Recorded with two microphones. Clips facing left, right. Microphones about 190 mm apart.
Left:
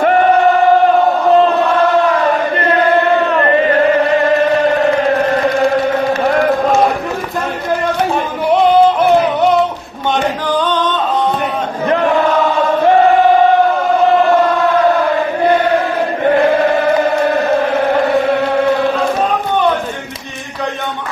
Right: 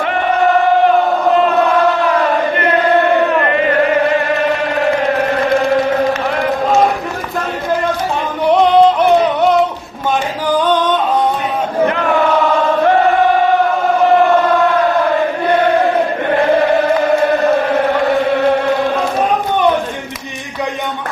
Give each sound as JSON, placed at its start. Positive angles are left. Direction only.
{"t": 8.4, "sound": "music", "side_deg": 0}
{"t": 10.6, "sound": "music", "side_deg": -10}